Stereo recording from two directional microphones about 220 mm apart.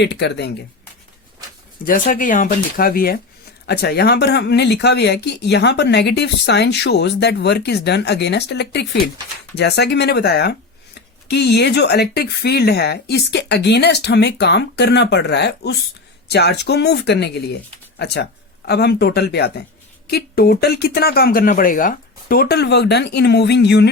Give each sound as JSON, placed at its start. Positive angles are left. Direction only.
{"t": 0.0, "sound": "speech", "side_deg": 50}
{"t": 1.8, "sound": "speech", "side_deg": 40}